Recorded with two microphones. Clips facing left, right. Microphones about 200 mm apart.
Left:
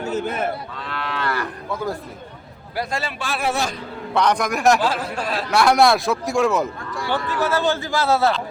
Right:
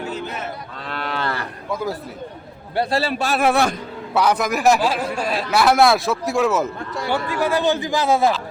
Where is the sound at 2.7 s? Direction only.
30° right (ahead or behind).